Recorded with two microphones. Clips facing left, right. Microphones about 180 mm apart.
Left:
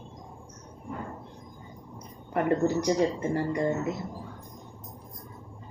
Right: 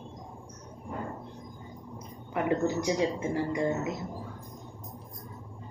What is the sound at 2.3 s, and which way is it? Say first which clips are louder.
A woman's voice: left 3 dB; 40° left (ahead or behind).